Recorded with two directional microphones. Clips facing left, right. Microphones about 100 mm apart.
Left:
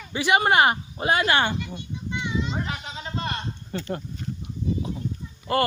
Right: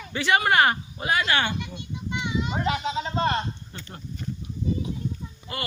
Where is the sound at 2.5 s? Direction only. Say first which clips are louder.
Right 5 dB; 90° right.